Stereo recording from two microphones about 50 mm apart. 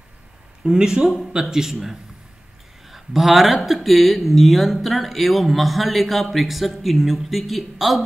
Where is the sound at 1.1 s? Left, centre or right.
Centre.